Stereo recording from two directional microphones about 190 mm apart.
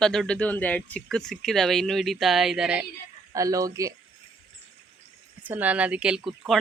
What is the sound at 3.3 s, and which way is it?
Speech, 20° right (ahead or behind).